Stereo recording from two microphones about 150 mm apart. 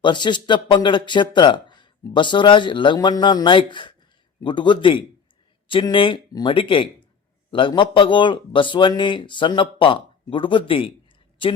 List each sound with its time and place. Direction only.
0.0 s speech: 30° left (ahead or behind)